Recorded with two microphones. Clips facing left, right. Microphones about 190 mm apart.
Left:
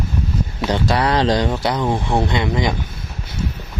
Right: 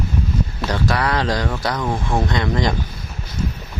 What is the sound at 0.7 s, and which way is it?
Speech, 25° left (ahead or behind).